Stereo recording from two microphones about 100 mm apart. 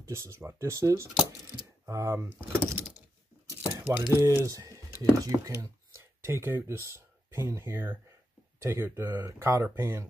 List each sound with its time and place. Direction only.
0.1 s speech: 25° right (ahead or behind)
3.6 s a sound: 20° right (ahead or behind)
4.1 s speech: 25° right (ahead or behind)